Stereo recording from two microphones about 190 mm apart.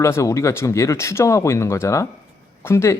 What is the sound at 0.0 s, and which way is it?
Speech, 15° left (ahead or behind).